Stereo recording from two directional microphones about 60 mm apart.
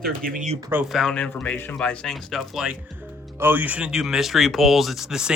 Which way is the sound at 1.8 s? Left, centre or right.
Centre.